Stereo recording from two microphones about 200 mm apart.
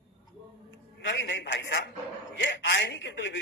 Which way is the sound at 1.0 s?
65° left (ahead or behind).